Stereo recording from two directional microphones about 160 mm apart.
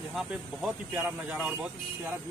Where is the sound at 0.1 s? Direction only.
5° right (ahead or behind).